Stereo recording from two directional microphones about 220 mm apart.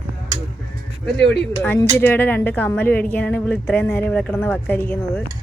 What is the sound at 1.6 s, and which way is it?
A woman's voice, 10° left (ahead or behind).